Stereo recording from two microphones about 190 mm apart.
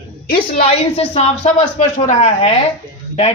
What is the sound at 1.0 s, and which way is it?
Speech, 35° left (ahead or behind).